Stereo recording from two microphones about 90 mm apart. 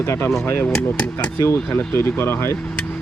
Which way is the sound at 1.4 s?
30° left (ahead or behind).